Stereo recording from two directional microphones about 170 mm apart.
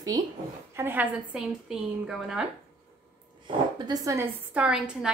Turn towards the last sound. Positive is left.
turn(degrees=-5)  # may be behind; listen again after turning